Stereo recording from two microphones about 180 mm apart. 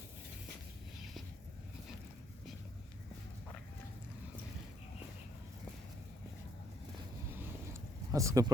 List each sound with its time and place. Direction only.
8.1 s speech: 15° right (ahead or behind)